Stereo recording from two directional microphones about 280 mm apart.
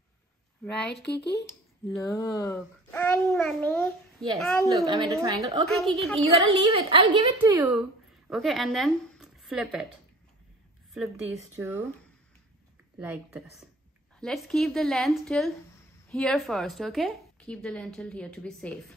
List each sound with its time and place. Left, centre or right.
1.0 s speech: left
1.9 s a child's voice: centre
5.1 s a woman's voice: centre
5.7 s a woman's voice: centre
6.1 s a woman's voice: centre
11.3 s a woman's voice: centre
13.0 s a woman's voice: centre